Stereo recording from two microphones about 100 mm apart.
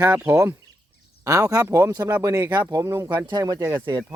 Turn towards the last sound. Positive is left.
turn(degrees=-35)  # may be behind; listen again after turning